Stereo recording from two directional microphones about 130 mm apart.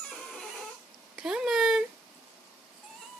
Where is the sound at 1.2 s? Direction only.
5° right (ahead or behind).